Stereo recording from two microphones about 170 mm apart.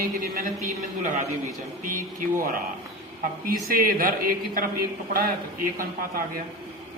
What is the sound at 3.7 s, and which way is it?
Speech, 60° right (ahead or behind).